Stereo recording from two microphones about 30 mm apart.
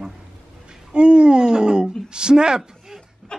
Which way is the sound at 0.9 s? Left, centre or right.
Right.